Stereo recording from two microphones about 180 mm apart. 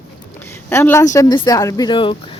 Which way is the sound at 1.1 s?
25° left (ahead or behind).